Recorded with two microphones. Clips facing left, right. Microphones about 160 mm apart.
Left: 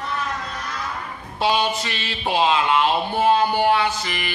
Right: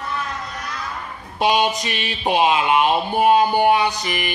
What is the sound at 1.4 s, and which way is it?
Speech, 15° right (ahead or behind).